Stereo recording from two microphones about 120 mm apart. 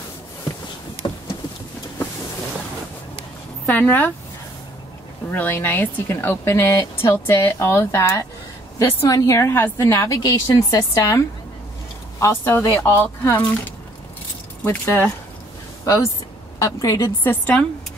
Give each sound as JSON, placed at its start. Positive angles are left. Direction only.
{"t": 1.0, "sound": "a sound", "side_deg": 45}
{"t": 3.6, "sound": "speech", "side_deg": 15}
{"t": 5.3, "sound": "a woman's voice", "side_deg": 15}
{"t": 14.6, "sound": "a woman's voice", "side_deg": 15}
{"t": 17.2, "sound": "speech", "side_deg": 15}